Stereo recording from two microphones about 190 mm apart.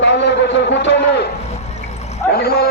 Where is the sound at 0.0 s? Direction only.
65° left (ahead or behind).